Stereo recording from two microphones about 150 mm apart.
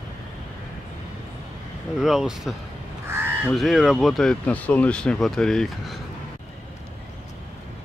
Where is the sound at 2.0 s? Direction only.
Centre (ahead or behind).